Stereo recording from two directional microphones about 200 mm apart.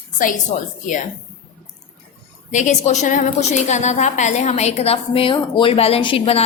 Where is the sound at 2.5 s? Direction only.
35° left (ahead or behind).